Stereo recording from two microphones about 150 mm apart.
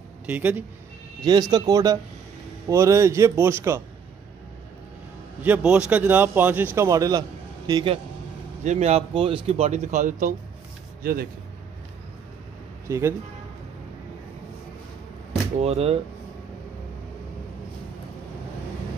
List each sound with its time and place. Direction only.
0.3 s a man's voice: 10° right (ahead or behind)
1.2 s a man's voice: 30° right (ahead or behind)
5.4 s a man's voice: 10° right (ahead or behind); by 8.0 s 35° right (ahead or behind)
8.6 s speech: 50° right (ahead or behind)
9.1 s speech: 35° right (ahead or behind); by 10.3 s 60° right (ahead or behind)
11.0 s speech: 85° right
12.8 s speech: 20° right (ahead or behind)
15.6 s speech: 40° right (ahead or behind)